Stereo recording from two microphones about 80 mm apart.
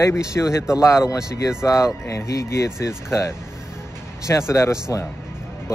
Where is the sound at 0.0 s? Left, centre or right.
Left.